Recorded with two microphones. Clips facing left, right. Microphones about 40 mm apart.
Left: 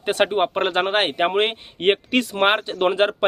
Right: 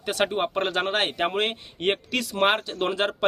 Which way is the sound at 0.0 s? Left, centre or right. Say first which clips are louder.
Left 5 dB; left.